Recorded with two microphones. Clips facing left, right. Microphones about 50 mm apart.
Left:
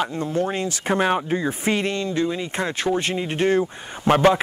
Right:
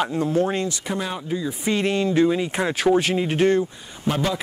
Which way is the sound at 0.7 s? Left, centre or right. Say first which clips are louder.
Left 7 dB; left.